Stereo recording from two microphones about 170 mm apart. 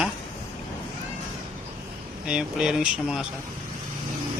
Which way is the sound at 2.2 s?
5° right (ahead or behind).